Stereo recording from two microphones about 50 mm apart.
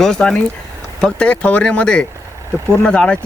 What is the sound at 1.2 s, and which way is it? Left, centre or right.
Speech, left.